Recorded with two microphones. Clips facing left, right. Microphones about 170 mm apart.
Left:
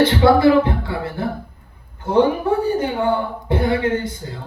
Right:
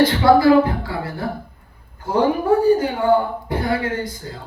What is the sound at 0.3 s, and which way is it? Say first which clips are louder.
Speech: even; 25° left (ahead or behind).